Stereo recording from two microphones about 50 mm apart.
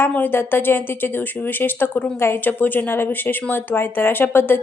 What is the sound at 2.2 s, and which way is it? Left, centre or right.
Speech, left.